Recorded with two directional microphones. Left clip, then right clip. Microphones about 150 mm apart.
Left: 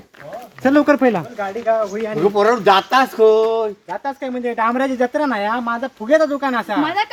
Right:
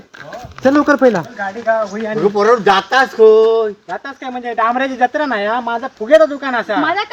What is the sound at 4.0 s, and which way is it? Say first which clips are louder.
Speech: left 2 dB; 40° left (ahead or behind).